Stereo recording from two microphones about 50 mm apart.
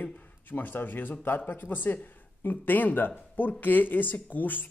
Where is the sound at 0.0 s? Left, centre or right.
Left.